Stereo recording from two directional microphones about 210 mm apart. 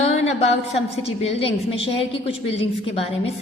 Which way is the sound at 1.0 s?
30° left (ahead or behind).